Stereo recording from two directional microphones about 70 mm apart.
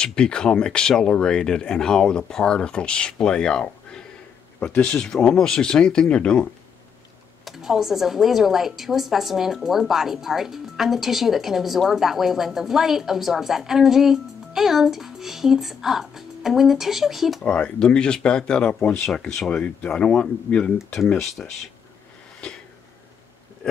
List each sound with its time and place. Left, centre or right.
0.0 s speech: centre
7.4 s speech: centre
17.5 s speech: centre
21.2 s speech: centre
22.4 s a sound: centre